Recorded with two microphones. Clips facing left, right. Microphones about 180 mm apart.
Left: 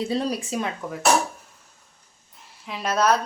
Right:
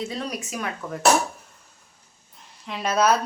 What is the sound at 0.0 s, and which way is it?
Speech, 30° left (ahead or behind).